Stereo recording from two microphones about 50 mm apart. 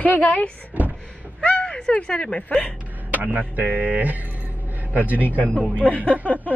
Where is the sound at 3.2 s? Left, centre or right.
Right.